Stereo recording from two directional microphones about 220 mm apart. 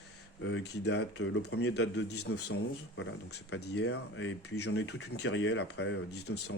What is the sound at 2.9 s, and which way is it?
Speech, 60° left (ahead or behind).